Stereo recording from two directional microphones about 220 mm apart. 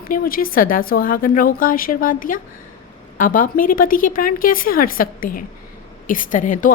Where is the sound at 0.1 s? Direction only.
40° left (ahead or behind).